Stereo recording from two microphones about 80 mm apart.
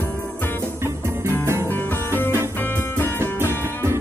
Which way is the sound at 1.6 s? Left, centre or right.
Left.